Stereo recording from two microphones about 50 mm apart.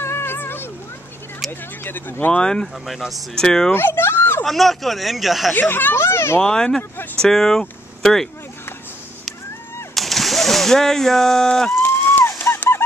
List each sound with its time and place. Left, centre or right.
0.0 s music: left
1.9 s speech: left
2.3 s speech: centre
3.7 s a sound: left
4.5 s speech: centre
5.7 s speech: left
5.9 s speech: left
6.4 s speech: centre
9.9 s splash: centre
11.8 s a sound: left
12.5 s honk: left